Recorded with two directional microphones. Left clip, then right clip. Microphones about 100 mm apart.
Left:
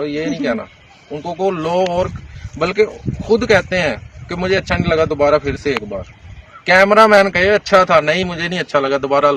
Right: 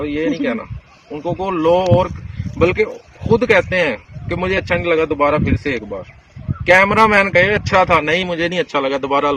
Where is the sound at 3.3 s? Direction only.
40° left (ahead or behind).